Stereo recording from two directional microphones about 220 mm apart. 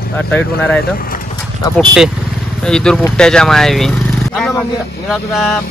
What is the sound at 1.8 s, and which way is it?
Speech, centre (ahead or behind).